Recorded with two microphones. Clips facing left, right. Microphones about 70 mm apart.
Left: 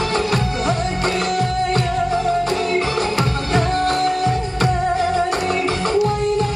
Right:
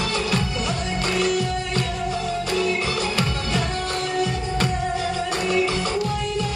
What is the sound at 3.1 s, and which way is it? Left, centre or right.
Music, left.